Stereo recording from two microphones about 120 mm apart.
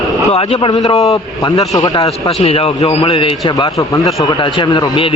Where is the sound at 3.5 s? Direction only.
35° left (ahead or behind).